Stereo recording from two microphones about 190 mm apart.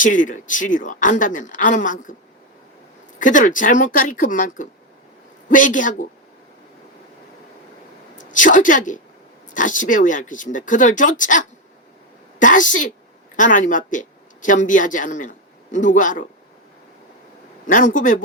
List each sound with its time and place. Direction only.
0.0 s speech: 45° left (ahead or behind)
3.2 s speech: 45° left (ahead or behind)
8.2 s speech: 45° left (ahead or behind)
17.7 s speech: 45° left (ahead or behind)